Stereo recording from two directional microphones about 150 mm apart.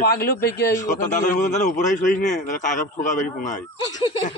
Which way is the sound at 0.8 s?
55° left (ahead or behind).